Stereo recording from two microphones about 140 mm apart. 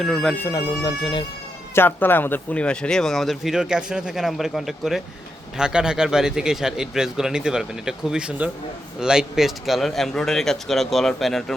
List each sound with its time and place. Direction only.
0.0 s speech: 5° left (ahead or behind)
0.4 s speech: 25° left (ahead or behind)
1.7 s speech: 15° left (ahead or behind)